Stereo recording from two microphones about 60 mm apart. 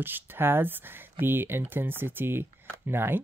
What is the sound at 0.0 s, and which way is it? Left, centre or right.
Speech, right.